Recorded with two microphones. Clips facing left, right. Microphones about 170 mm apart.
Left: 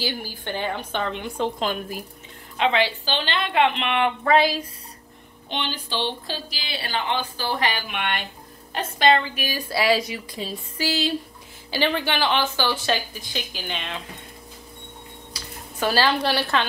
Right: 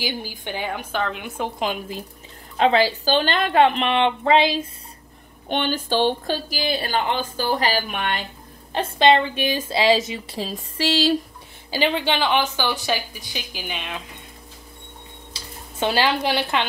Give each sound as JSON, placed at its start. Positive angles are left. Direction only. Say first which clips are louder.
{"t": 0.0, "sound": "a woman's voice", "louder": "right 1 dB", "side_deg": -15}
{"t": 1.4, "sound": "a woman's voice", "louder": "even", "side_deg": -15}
{"t": 2.5, "sound": "a woman's voice", "louder": "right 4 dB", "side_deg": -40}
{"t": 5.5, "sound": "speech", "louder": "right 7 dB", "side_deg": -50}
{"t": 8.7, "sound": "a woman's voice", "louder": "right 3 dB", "side_deg": -30}
{"t": 11.7, "sound": "a woman's voice", "louder": "right 2 dB", "side_deg": -20}
{"t": 15.3, "sound": "speech", "louder": "right 2 dB", "side_deg": -20}